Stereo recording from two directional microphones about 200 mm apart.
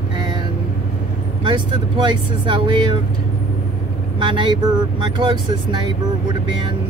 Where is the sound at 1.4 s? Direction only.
25° right (ahead or behind).